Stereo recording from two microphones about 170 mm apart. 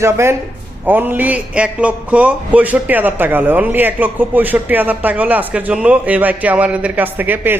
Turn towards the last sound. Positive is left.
turn(degrees=-10)  # may be behind; listen again after turning